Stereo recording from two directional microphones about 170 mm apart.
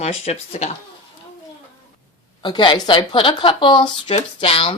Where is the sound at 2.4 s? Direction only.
25° left (ahead or behind).